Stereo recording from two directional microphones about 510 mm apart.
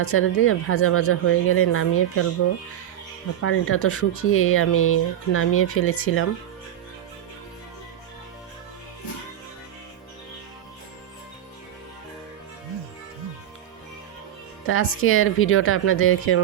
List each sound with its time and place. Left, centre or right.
0.0 s speech: left
3.4 s speech: left
14.7 s speech: left